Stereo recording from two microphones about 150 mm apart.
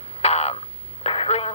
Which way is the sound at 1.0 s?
40° left (ahead or behind).